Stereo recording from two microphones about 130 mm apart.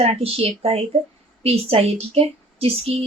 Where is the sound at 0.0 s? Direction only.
50° right (ahead or behind).